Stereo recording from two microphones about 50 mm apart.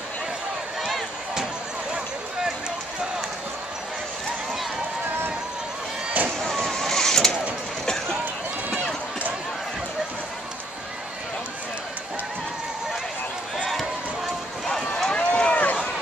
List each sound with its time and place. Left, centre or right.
6.4 s vehicle: centre
7.8 s a sound: centre
14.9 s run: centre